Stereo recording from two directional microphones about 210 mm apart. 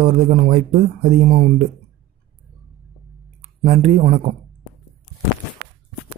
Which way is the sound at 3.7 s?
30° right (ahead or behind).